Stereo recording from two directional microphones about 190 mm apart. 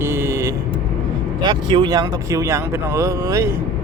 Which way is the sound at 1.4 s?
25° right (ahead or behind).